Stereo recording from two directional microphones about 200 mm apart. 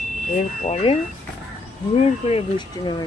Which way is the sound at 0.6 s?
30° left (ahead or behind).